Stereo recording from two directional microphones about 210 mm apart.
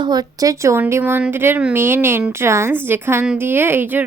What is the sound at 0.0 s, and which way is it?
A woman's voice, 20° right (ahead or behind).